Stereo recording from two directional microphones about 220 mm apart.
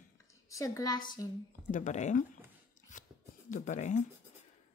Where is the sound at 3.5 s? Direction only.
35° left (ahead or behind).